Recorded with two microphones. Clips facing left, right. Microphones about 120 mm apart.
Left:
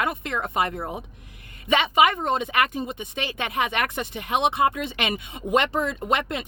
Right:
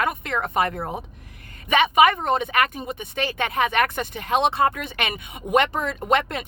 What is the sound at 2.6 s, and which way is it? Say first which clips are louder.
Speech: even; 20° left (ahead or behind).